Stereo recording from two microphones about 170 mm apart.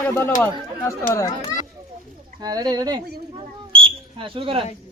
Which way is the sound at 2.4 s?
20° right (ahead or behind).